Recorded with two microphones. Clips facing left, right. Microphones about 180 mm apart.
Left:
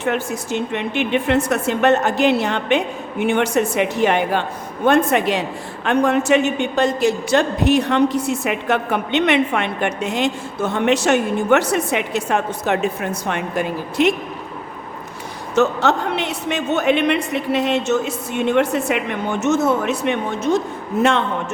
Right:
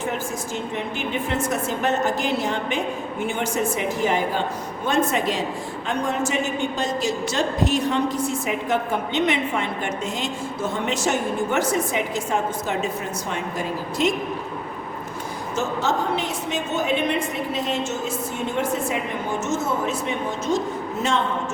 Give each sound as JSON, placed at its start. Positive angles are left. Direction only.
{"t": 0.0, "sound": "a woman's voice", "side_deg": 70}
{"t": 15.5, "sound": "a woman's voice", "side_deg": 70}